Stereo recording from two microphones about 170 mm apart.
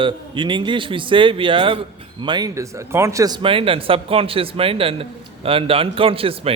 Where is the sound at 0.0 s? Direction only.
30° right (ahead or behind).